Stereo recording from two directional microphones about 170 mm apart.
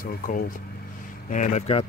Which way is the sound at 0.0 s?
55° left (ahead or behind).